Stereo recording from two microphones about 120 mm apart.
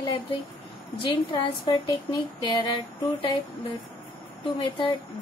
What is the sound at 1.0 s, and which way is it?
A woman's voice, 50° left (ahead or behind).